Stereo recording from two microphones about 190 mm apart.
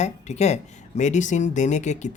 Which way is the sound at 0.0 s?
35° left (ahead or behind).